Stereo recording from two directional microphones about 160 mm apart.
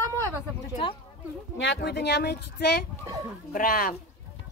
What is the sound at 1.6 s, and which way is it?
Speech, 90° left.